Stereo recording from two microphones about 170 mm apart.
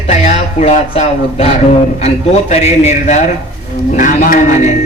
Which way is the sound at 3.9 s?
50° left (ahead or behind).